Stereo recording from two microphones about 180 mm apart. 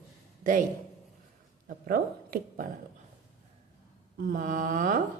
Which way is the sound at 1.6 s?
50° right (ahead or behind).